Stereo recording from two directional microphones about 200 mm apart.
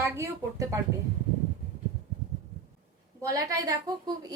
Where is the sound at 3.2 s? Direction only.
15° right (ahead or behind).